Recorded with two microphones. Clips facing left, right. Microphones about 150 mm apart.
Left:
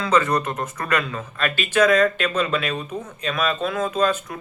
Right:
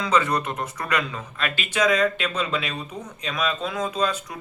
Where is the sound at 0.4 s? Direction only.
10° right (ahead or behind).